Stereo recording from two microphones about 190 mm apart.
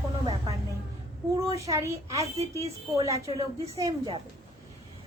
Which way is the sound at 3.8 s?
25° right (ahead or behind).